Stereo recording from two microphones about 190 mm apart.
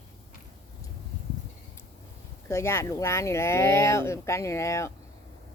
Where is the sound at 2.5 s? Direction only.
15° left (ahead or behind).